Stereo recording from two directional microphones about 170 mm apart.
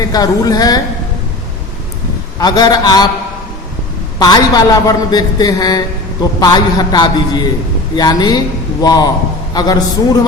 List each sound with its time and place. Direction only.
0.0 s a man's voice: 20° left (ahead or behind)
2.4 s a man's voice: 25° left (ahead or behind)
4.2 s a man's voice: 20° left (ahead or behind)